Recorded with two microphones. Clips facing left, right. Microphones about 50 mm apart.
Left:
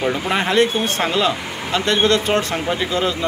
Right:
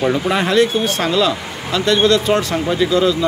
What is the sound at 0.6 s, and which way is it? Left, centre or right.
Speech, left.